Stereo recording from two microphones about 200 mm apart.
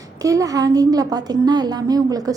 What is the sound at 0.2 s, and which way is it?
A woman's voice, 15° right (ahead or behind).